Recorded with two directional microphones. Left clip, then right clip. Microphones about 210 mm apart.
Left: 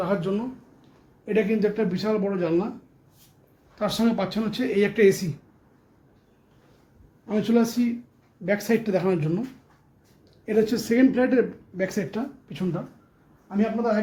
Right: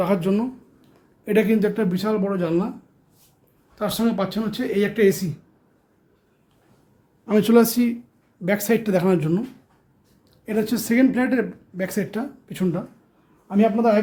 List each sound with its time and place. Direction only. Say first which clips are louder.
0.0 s speech: right 4 dB; 30° right (ahead or behind); by 2.6 s 10° right (ahead or behind)
3.8 s speech: right 1 dB; 5° right (ahead or behind)
7.3 s speech: right 7 dB; 30° right (ahead or behind)
10.4 s speech: left 2 dB; 10° right (ahead or behind)